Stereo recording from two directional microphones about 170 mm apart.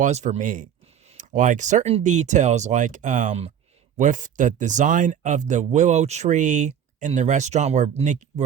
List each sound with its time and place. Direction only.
0.0 s speech: 45° right (ahead or behind)